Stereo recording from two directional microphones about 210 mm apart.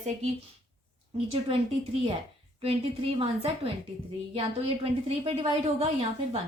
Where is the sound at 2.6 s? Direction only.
30° right (ahead or behind).